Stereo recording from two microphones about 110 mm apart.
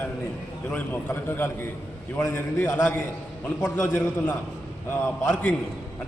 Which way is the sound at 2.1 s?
20° left (ahead or behind).